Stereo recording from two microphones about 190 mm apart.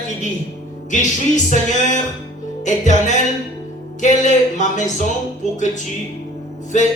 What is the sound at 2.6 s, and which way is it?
Speech, 40° left (ahead or behind).